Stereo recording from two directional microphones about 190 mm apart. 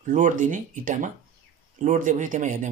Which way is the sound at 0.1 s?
45° right (ahead or behind).